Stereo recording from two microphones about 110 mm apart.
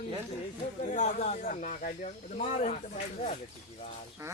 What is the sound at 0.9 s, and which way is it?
Speech, 90° left.